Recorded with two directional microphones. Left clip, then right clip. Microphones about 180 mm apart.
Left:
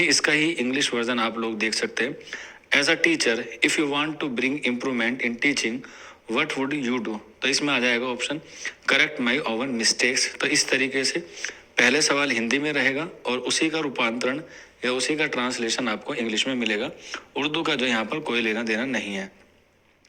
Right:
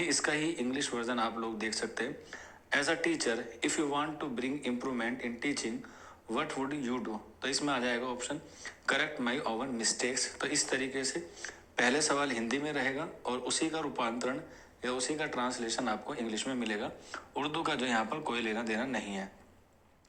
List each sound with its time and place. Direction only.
0.0 s a man's voice: 20° left (ahead or behind)